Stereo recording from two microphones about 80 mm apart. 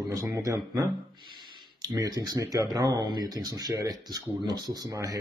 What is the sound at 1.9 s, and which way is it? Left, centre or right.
Speech, right.